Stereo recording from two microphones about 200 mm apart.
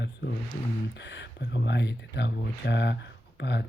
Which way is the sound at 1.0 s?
60° left (ahead or behind).